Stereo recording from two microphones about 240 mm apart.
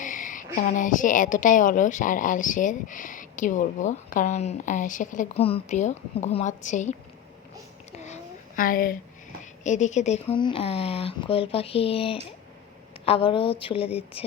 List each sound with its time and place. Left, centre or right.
0.0 s a woman's voice: left
7.9 s a sound: left
9.4 s a woman's voice: left